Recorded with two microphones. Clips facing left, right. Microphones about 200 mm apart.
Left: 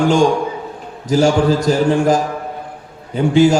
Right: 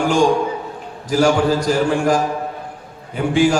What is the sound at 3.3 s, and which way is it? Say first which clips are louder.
Speech: left 4 dB; 25° left (ahead or behind).